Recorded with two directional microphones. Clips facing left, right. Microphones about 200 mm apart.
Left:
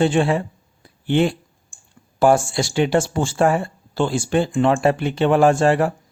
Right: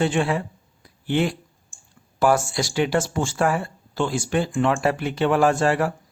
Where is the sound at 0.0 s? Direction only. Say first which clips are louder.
Left 4 dB; 30° left (ahead or behind).